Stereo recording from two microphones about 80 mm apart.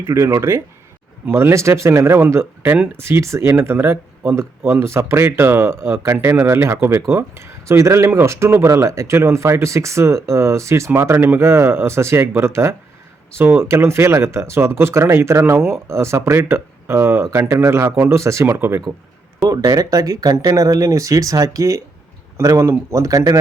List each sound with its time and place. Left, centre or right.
0.0 s speech: right
19.5 s speech: right